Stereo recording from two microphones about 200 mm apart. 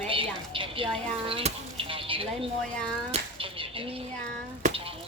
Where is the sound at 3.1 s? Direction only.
25° right (ahead or behind).